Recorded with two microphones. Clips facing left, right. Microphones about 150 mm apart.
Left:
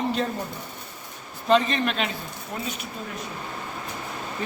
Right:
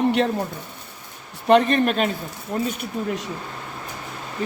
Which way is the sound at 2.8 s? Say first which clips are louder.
Right 8 dB; 85° right.